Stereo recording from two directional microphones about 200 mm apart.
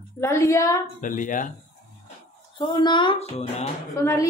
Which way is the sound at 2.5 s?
20° left (ahead or behind).